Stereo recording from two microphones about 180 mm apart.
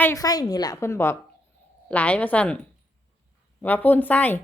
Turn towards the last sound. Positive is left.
turn(degrees=10)  # may be behind; listen again after turning